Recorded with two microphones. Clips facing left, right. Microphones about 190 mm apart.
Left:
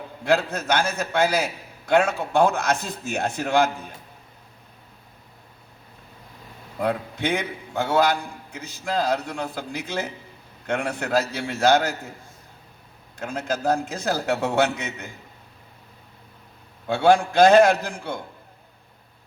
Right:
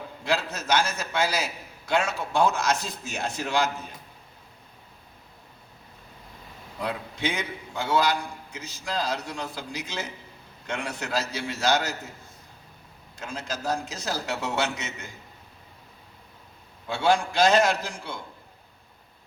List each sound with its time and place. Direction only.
0.3 s a man's voice: 55° left (ahead or behind)
6.8 s a man's voice: 55° left (ahead or behind)
13.1 s a man's voice: 55° left (ahead or behind)
16.9 s a man's voice: 55° left (ahead or behind)